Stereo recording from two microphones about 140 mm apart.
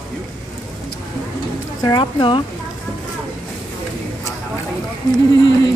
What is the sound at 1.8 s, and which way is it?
Speech, 30° left (ahead or behind).